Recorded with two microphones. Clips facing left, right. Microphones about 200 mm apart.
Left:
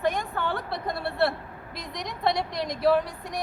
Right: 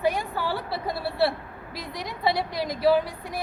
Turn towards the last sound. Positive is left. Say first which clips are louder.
# right 1 dB
turn(degrees=0)  # may be behind; listen again after turning